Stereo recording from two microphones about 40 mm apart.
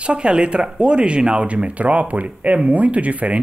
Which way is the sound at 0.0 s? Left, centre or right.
Right.